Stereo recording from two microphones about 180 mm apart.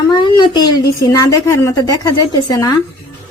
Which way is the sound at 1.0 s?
20° left (ahead or behind).